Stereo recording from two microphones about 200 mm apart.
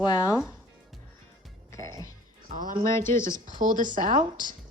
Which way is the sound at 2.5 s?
45° right (ahead or behind).